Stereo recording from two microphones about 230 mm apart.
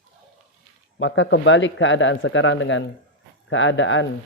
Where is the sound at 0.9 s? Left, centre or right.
Left.